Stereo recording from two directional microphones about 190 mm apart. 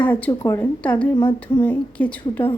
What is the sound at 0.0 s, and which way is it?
Speech, 10° left (ahead or behind).